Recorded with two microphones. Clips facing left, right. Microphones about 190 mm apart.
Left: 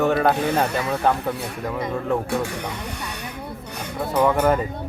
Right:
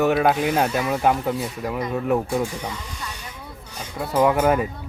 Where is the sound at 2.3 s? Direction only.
65° left (ahead or behind).